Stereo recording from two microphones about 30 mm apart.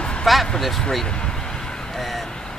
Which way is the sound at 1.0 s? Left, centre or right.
Left.